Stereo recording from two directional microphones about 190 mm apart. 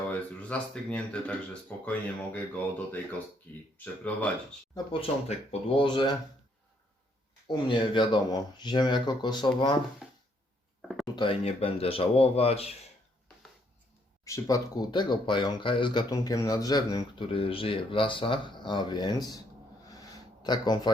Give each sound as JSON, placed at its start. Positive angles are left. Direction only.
{"t": 0.1, "sound": "speech", "side_deg": 5}
{"t": 4.7, "sound": "speech", "side_deg": 30}
{"t": 7.4, "sound": "speech", "side_deg": 25}
{"t": 10.0, "sound": "a sound", "side_deg": 0}
{"t": 11.0, "sound": "speech", "side_deg": 25}
{"t": 14.3, "sound": "speech", "side_deg": 20}
{"t": 20.4, "sound": "speech", "side_deg": 20}